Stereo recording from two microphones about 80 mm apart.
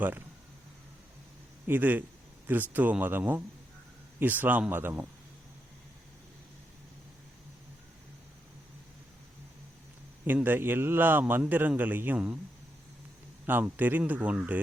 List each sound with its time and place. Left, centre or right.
1.6 s a man's voice: right
10.2 s a man's voice: right
13.4 s a man's voice: right